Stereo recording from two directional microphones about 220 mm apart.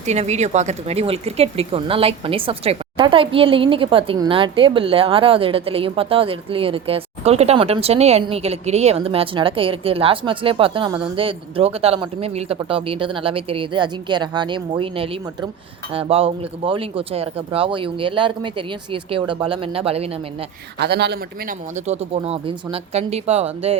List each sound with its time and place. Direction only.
0.0 s a woman's voice: 30° right (ahead or behind)
20.7 s a man's voice: 50° right (ahead or behind)
21.8 s a woman's voice: 25° right (ahead or behind)